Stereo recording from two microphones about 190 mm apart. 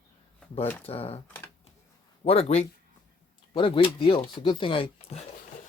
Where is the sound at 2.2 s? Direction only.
35° left (ahead or behind).